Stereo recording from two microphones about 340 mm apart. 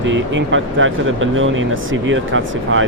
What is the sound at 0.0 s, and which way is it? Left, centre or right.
Speech, right.